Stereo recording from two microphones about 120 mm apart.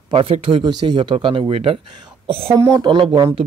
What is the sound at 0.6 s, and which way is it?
Speech, 40° right (ahead or behind).